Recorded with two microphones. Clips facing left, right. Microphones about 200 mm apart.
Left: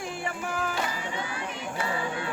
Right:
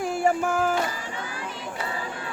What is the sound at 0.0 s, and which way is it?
Music, 45° right (ahead or behind).